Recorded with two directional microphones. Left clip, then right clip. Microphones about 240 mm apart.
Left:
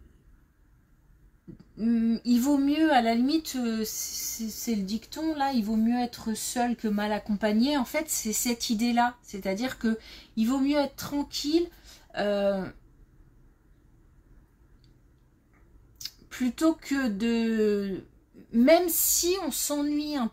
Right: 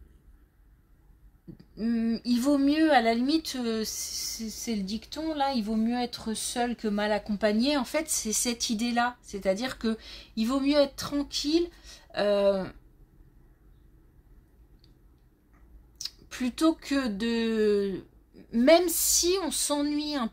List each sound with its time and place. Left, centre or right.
1.8 s speech: right
16.0 s speech: right